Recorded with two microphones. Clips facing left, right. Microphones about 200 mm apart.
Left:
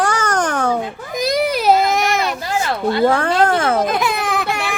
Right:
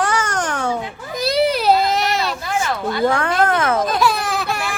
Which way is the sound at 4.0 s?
20° left (ahead or behind).